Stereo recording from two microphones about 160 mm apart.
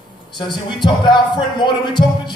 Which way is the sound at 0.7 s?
30° left (ahead or behind).